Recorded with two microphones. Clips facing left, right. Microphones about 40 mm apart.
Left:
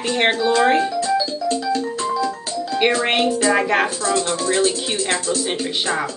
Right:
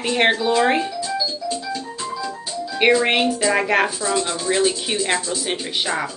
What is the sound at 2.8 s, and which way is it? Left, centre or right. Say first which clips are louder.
Speech: right 2 dB; centre.